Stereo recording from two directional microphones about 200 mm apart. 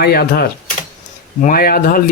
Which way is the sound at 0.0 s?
50° left (ahead or behind).